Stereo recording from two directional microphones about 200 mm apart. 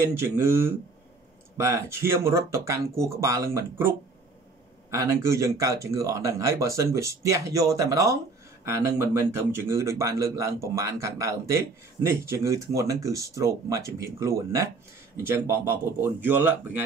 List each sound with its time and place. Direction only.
0.0 s a man's voice: 10° right (ahead or behind)
4.9 s a man's voice: 15° right (ahead or behind)